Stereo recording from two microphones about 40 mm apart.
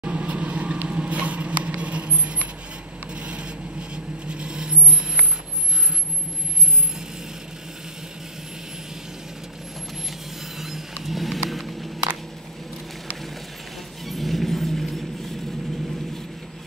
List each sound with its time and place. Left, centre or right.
0.0 s vehicle: right
0.8 s a sound: right
1.8 s vehicle: right
3.2 s rub: right
3.9 s vehicle: right
10.6 s a sound: centre
14.0 s vehicle: centre